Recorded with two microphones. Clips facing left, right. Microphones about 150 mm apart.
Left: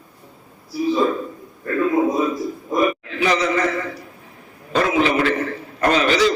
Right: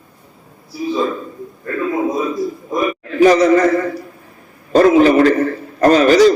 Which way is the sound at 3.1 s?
40° right (ahead or behind).